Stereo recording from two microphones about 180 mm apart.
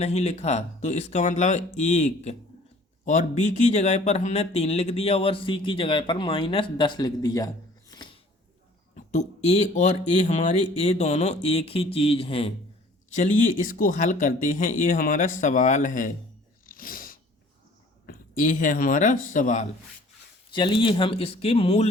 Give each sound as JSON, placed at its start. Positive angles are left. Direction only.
{"t": 0.0, "sound": "speech", "side_deg": 35}
{"t": 9.0, "sound": "speech", "side_deg": 40}
{"t": 13.1, "sound": "speech", "side_deg": 45}
{"t": 16.6, "sound": "a sound", "side_deg": 50}
{"t": 18.0, "sound": "speech", "side_deg": 50}
{"t": 20.5, "sound": "speech", "side_deg": 25}